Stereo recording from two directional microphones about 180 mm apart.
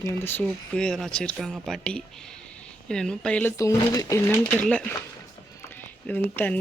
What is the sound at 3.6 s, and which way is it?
Speech, 15° left (ahead or behind).